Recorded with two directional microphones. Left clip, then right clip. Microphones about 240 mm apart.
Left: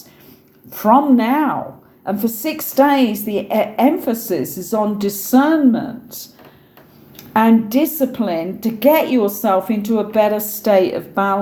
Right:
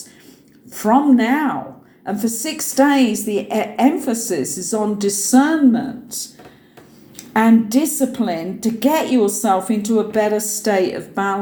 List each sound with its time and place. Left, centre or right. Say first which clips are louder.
0.7 s a woman's voice: left 2 dB; left